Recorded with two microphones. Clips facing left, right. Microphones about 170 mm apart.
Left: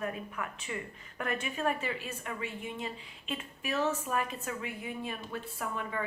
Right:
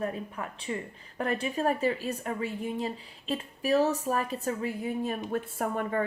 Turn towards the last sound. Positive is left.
turn(degrees=-50)  # may be behind; listen again after turning